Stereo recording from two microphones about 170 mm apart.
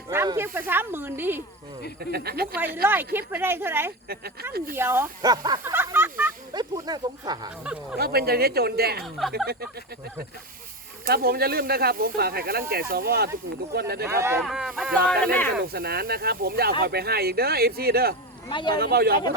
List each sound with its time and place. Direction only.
0.1 s snake: 15° right (ahead or behind)
0.7 s speech: 10° right (ahead or behind)
2.0 s speech: 70° right (ahead or behind)
2.8 s speech: 10° right (ahead or behind)
6.5 s speech: 25° right (ahead or behind)
7.6 s speech: 5° right (ahead or behind)
7.9 s speech: 70° right (ahead or behind)
11.0 s speech: 65° right (ahead or behind)
14.1 s speech: 15° right (ahead or behind)
14.4 s speech: centre (ahead or behind)
15.6 s speech: 65° right (ahead or behind)
18.4 s speech: 25° left (ahead or behind)
18.7 s speech: 65° right (ahead or behind)